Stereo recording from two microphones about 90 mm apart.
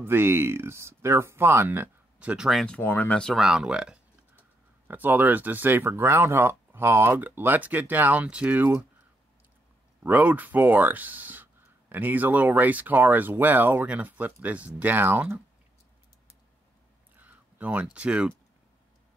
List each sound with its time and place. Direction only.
0.0 s speech: 25° right (ahead or behind); by 2.6 s 5° right (ahead or behind)
2.8 s speech: 20° left (ahead or behind)
3.3 s speech: 5° right (ahead or behind)
10.0 s speech: 15° right (ahead or behind)
17.2 s a sound: 15° right (ahead or behind)
17.9 s speech: 10° right (ahead or behind)